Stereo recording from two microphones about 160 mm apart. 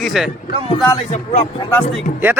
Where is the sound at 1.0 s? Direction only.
45° left (ahead or behind).